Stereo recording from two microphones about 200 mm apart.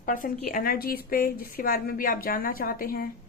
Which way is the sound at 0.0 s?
45° left (ahead or behind).